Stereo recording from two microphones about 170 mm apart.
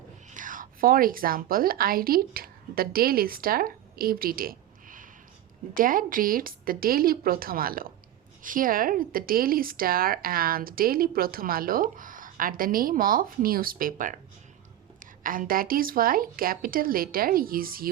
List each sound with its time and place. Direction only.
0.3 s a woman's voice: 50° right (ahead or behind)